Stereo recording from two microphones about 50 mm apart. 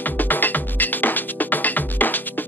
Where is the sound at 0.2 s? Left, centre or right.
Left.